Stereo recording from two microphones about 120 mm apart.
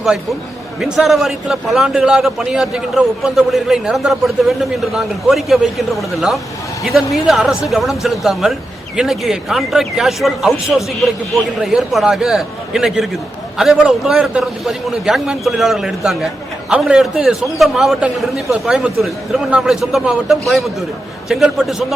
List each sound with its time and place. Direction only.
0.8 s a man's voice: centre (ahead or behind)